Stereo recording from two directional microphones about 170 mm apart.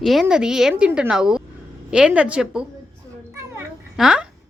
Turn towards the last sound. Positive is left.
turn(degrees=-5)  # may be behind; listen again after turning